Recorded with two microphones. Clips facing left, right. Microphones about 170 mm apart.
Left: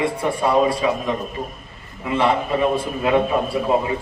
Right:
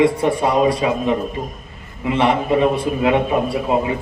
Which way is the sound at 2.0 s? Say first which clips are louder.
Right 2 dB; 20° right (ahead or behind).